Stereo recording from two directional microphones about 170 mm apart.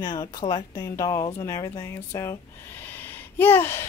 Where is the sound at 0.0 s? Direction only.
20° left (ahead or behind).